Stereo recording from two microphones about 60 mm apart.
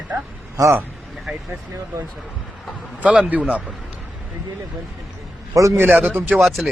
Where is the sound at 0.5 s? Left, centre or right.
Right.